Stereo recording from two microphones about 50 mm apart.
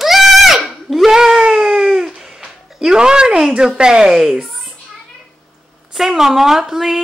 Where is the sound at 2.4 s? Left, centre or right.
Centre.